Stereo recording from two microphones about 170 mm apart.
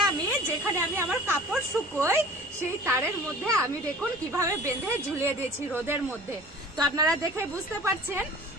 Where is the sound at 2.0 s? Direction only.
15° right (ahead or behind).